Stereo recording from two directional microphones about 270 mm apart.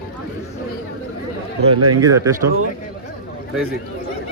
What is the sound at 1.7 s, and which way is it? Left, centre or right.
Speech, right.